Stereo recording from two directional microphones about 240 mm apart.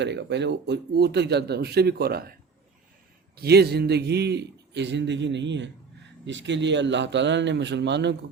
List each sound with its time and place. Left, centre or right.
0.0 s a man's voice: right
3.3 s a man's voice: right